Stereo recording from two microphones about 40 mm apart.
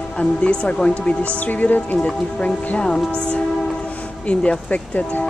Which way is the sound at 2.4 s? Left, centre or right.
Left.